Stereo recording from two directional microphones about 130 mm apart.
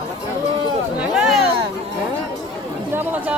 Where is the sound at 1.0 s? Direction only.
5° right (ahead or behind).